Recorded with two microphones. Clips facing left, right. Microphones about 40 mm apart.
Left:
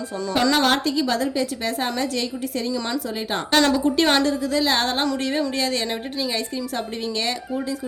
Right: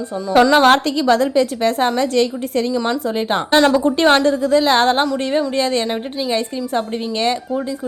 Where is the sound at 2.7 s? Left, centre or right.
Right.